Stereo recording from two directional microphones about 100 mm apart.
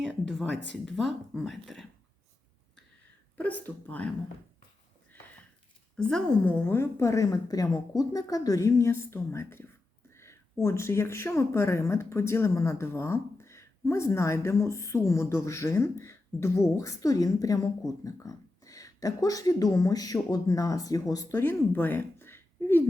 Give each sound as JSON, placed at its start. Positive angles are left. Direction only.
{"t": 0.0, "sound": "speech", "side_deg": 0}
{"t": 3.3, "sound": "speech", "side_deg": 15}
{"t": 6.0, "sound": "speech", "side_deg": 10}
{"t": 6.7, "sound": "speech", "side_deg": 25}
{"t": 21.3, "sound": "speech", "side_deg": 20}